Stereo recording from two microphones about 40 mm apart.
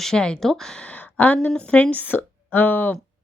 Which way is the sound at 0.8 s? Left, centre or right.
Left.